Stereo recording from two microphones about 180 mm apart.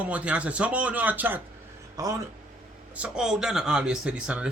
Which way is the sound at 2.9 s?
5° right (ahead or behind).